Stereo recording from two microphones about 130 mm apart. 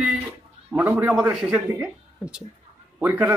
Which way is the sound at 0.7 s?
10° right (ahead or behind).